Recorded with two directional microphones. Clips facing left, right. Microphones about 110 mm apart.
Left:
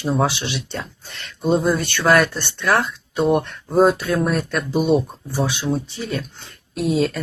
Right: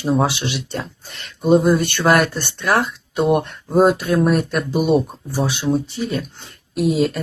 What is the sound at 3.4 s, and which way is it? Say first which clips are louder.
Speech: right 1 dB; 10° right (ahead or behind).